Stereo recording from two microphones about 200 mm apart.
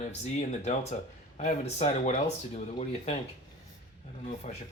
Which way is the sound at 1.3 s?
35° left (ahead or behind).